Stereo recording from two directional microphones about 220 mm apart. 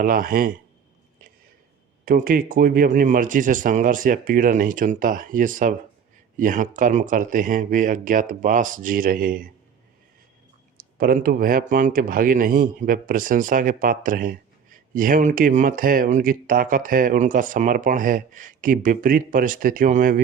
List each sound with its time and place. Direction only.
0.0 s speech: 40° right (ahead or behind)
2.0 s speech: 40° right (ahead or behind)
10.8 s speech: 40° right (ahead or behind)